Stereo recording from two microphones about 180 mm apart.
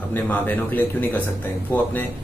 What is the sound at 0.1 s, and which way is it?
A man's voice, 10° left (ahead or behind).